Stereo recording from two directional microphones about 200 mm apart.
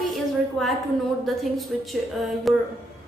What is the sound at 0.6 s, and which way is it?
A woman's voice, centre (ahead or behind).